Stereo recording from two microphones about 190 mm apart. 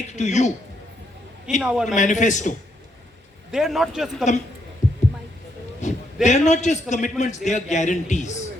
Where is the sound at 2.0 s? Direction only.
40° left (ahead or behind).